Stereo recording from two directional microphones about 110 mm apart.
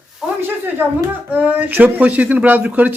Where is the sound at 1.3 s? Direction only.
15° right (ahead or behind).